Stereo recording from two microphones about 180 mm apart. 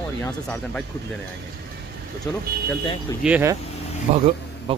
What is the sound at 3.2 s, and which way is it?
Speech, 10° right (ahead or behind).